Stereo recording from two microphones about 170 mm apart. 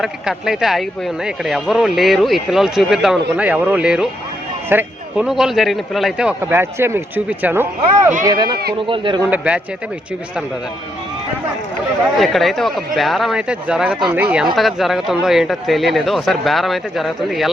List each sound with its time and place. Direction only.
0.0 s speech: centre (ahead or behind)
6.4 s speech: 15° right (ahead or behind)
8.2 s speech: 25° right (ahead or behind)
9.3 s speech: 5° right (ahead or behind)
12.1 s speech: centre (ahead or behind)